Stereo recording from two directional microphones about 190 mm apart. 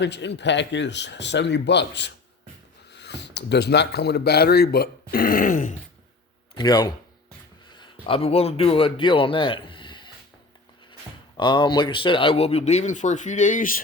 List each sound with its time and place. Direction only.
0.0 s speech: 65° left (ahead or behind); by 5.7 s 45° left (ahead or behind)
6.6 s a man's voice: 20° left (ahead or behind)
11.3 s speech: 25° left (ahead or behind); by 13.8 s 45° left (ahead or behind)